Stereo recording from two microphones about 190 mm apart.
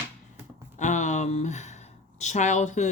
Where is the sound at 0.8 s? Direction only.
40° left (ahead or behind).